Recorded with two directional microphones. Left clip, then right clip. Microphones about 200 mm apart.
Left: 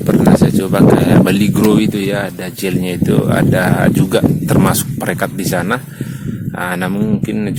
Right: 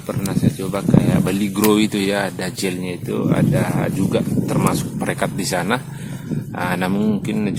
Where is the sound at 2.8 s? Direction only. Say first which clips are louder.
Left 7 dB; 25° left (ahead or behind).